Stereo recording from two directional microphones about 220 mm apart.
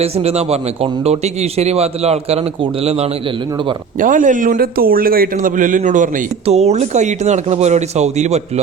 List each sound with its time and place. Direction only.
0.0 s a man's voice: 30° right (ahead or behind)